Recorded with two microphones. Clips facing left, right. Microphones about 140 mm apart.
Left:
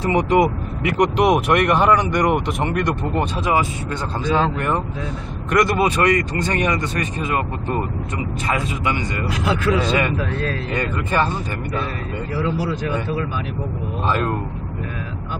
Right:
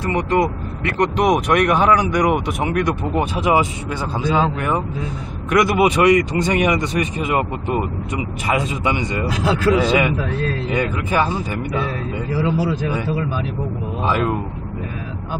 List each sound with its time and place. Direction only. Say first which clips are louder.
0.0 s speech: left 2 dB; 25° left (ahead or behind)
1.1 s speech: right 2 dB; centre (ahead or behind); by 3.6 s 15° right (ahead or behind)
4.2 s speech: right 1 dB; 5° right (ahead or behind); by 9.2 s 20° right (ahead or behind)
9.8 s speech: right 3 dB; 10° right (ahead or behind)
14.0 s speech: right 2 dB; 5° right (ahead or behind)